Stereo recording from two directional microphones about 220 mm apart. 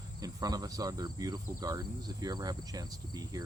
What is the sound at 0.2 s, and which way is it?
Cricket, 15° right (ahead or behind).